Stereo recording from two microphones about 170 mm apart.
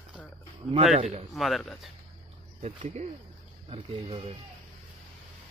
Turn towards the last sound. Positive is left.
turn(degrees=-35)  # may be behind; listen again after turning